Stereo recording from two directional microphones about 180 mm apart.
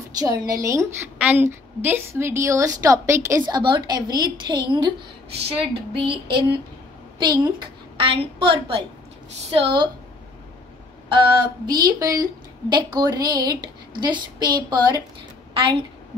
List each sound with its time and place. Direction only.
0.2 s a woman's voice: 20° right (ahead or behind)
5.9 s a woman's voice: 30° right (ahead or behind)
11.1 s a woman's voice: 25° right (ahead or behind)